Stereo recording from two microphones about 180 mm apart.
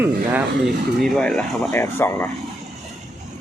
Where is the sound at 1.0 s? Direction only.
5° left (ahead or behind).